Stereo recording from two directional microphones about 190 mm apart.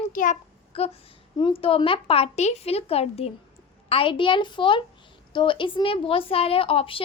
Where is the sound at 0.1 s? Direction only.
45° left (ahead or behind).